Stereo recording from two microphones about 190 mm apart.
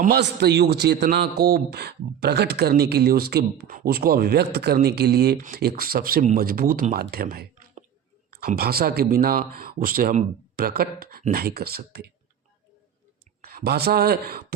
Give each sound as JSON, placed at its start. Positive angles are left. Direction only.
{"t": 0.0, "sound": "a man's voice", "side_deg": -55}
{"t": 13.4, "sound": "speech", "side_deg": -50}